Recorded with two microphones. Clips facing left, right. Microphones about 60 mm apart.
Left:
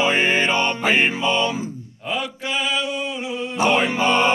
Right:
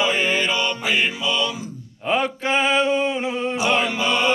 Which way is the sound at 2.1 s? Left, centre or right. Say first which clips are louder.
Right 5 dB; right.